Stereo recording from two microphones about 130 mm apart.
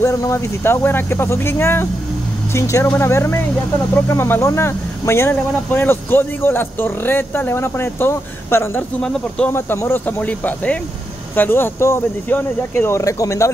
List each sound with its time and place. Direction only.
0.0 s speech: 20° left (ahead or behind)